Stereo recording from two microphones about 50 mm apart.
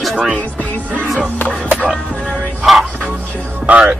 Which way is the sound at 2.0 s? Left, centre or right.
Left.